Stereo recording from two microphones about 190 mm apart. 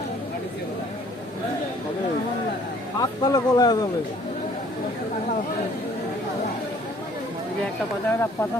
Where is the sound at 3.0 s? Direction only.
20° left (ahead or behind).